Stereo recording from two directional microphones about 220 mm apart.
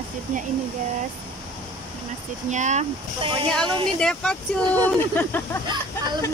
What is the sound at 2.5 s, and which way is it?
Speech, 30° right (ahead or behind).